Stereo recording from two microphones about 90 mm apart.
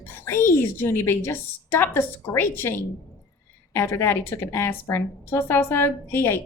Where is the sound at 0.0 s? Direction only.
25° left (ahead or behind).